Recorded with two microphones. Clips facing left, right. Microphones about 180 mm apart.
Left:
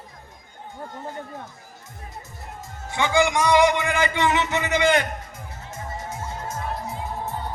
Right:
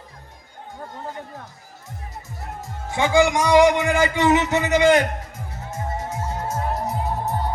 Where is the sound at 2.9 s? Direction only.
40° right (ahead or behind).